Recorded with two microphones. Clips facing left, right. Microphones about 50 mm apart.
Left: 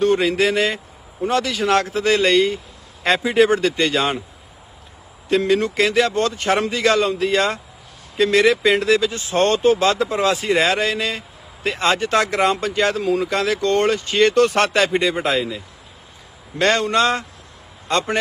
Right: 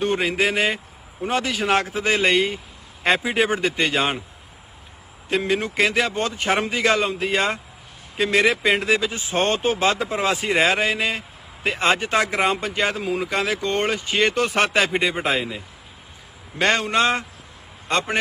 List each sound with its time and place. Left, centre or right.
0.0 s speech: centre
5.3 s speech: centre